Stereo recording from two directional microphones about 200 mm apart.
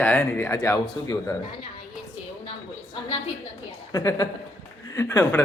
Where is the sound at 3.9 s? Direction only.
15° left (ahead or behind).